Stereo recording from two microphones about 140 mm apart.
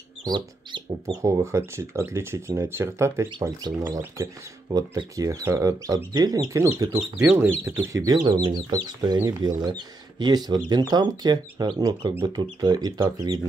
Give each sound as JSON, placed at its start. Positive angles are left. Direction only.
{"t": 0.2, "sound": "speech", "side_deg": -35}
{"t": 1.0, "sound": "speech", "side_deg": -20}
{"t": 3.3, "sound": "speech", "side_deg": -30}
{"t": 3.8, "sound": "speech", "side_deg": -20}